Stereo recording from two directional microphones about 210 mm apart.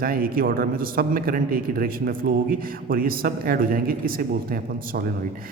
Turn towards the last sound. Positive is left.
turn(degrees=-45)  # may be behind; listen again after turning